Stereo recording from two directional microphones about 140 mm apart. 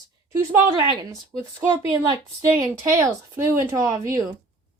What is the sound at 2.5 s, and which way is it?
A woman's voice, 25° right (ahead or behind).